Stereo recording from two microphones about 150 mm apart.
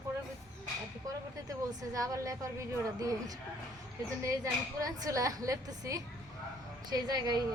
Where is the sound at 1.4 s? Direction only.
20° right (ahead or behind).